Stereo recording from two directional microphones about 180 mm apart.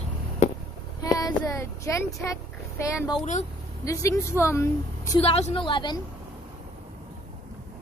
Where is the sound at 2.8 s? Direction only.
15° left (ahead or behind).